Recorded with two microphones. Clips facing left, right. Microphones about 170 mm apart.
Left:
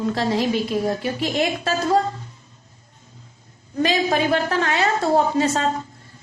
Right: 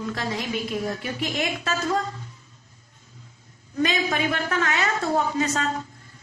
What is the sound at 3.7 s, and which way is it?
A woman's voice, 35° left (ahead or behind).